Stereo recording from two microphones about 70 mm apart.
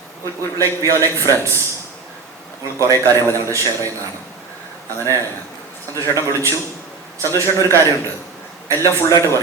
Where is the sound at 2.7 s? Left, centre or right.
Right.